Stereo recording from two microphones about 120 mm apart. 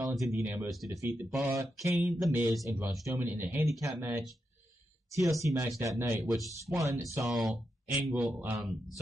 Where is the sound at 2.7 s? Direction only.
20° right (ahead or behind).